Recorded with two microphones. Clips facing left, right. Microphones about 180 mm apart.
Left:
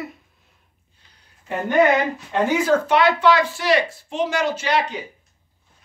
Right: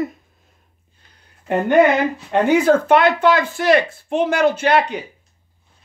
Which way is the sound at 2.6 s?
50° right (ahead or behind).